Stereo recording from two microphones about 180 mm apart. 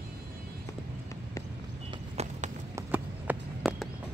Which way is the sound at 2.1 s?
40° right (ahead or behind).